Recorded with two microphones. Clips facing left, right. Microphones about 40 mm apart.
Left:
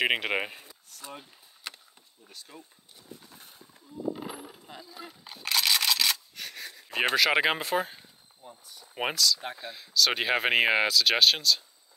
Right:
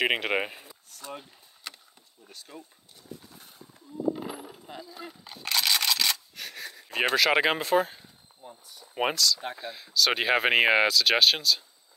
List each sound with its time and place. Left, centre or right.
0.0 s speech: centre
1.6 s vehicle: left
2.2 s speech: centre
4.1 s speech: centre